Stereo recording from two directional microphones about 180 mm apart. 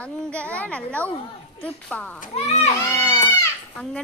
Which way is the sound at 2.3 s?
35° left (ahead or behind).